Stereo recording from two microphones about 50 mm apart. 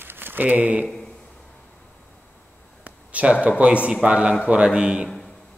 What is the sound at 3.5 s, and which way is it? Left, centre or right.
A man's voice, right.